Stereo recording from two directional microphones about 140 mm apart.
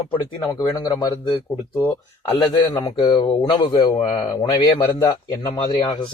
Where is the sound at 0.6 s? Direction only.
30° left (ahead or behind).